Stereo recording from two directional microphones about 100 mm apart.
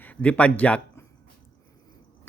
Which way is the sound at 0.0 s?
15° left (ahead or behind).